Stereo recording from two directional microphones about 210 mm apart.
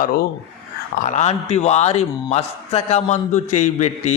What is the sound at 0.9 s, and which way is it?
A man's voice, 35° left (ahead or behind).